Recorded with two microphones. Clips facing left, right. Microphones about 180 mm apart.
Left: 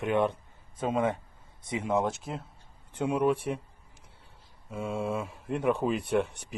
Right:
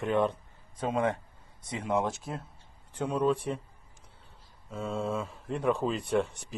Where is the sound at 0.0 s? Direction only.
10° left (ahead or behind).